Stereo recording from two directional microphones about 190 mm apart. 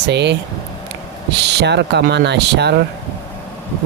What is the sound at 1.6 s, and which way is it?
Speech, 65° right (ahead or behind).